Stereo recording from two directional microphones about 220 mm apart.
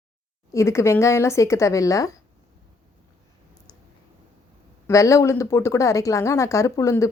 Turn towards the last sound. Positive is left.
turn(degrees=15)  # may be behind; listen again after turning